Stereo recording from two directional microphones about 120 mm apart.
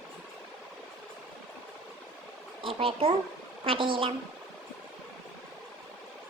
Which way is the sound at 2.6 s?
50° right (ahead or behind).